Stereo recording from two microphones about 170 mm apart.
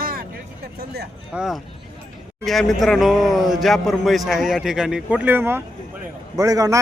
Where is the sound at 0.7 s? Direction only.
70° right (ahead or behind).